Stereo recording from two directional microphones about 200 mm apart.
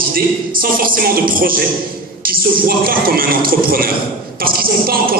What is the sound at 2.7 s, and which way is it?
A man's voice, 45° right (ahead or behind).